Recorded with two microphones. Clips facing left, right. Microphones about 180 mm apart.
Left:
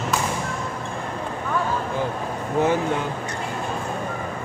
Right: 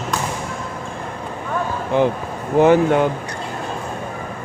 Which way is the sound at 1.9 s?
70° right (ahead or behind).